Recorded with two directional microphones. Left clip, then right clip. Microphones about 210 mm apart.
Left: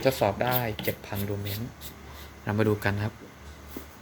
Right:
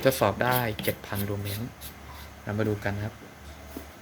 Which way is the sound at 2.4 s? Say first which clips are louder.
Left 3 dB; 25° left (ahead or behind).